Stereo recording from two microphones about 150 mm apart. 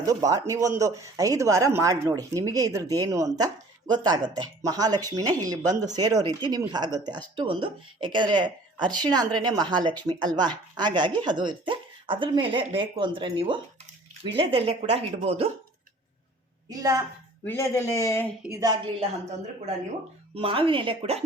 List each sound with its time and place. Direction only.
0.0 s speech: 25° right (ahead or behind)
8.9 s a woman's voice: 10° left (ahead or behind)
9.1 s speech: 25° right (ahead or behind)
16.6 s speech: 25° right (ahead or behind)
17.4 s speech: 15° left (ahead or behind)
18.5 s speech: 25° right (ahead or behind)
20.3 s speech: 35° right (ahead or behind)